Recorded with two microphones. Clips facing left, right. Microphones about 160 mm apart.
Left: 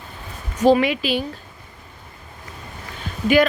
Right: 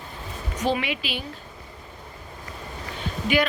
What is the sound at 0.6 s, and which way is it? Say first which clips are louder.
Speech: left 10 dB; 40° left (ahead or behind).